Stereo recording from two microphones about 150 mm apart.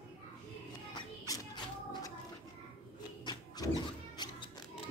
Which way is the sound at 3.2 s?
25° left (ahead or behind).